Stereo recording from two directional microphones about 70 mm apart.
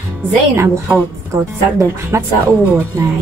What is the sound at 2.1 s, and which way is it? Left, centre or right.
Speech, right.